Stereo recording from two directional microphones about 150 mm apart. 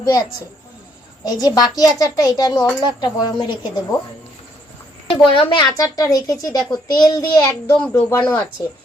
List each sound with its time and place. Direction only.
0.0 s a woman's voice: 25° left (ahead or behind)
5.0 s a child's voice: 35° left (ahead or behind); by 8.4 s 20° left (ahead or behind)